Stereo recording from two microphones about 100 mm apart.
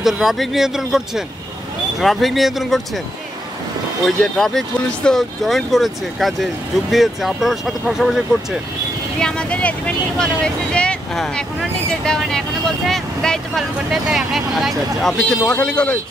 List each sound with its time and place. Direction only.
0.0 s speech: 5° right (ahead or behind)
4.0 s speech: 5° left (ahead or behind)
9.2 s speech: 10° left (ahead or behind)
15.6 s speech: 10° left (ahead or behind)